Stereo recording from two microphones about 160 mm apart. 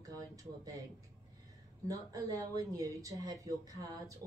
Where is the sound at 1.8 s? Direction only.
20° right (ahead or behind).